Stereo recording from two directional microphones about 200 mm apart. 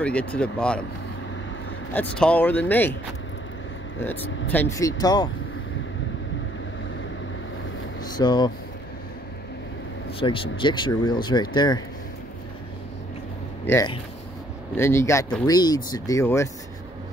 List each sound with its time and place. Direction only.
0.0 s speech: 5° left (ahead or behind)
2.1 s speech: 5° left (ahead or behind)
4.0 s speech: 10° left (ahead or behind)
8.0 s speech: 20° left (ahead or behind)
10.1 s speech: 25° left (ahead or behind)
13.7 s speech: 15° left (ahead or behind)